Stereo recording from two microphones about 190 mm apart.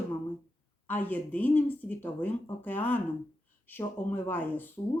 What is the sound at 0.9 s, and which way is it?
Speech, 10° left (ahead or behind).